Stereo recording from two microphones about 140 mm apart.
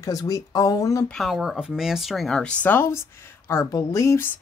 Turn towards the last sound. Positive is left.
turn(degrees=20)  # may be behind; listen again after turning